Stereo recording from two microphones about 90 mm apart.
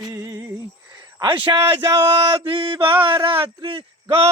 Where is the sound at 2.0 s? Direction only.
90° right.